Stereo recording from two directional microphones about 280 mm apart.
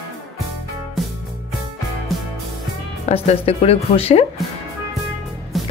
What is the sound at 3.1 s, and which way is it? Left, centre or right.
Speech, left.